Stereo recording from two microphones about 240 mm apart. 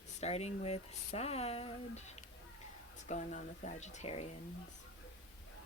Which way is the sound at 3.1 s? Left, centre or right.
Left.